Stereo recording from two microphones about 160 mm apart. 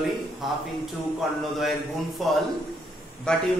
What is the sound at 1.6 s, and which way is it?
A man's voice, centre (ahead or behind).